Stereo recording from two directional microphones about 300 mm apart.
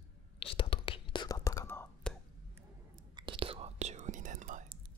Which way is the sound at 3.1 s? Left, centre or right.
Centre.